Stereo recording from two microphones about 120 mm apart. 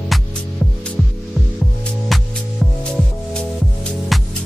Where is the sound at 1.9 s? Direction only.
Centre (ahead or behind).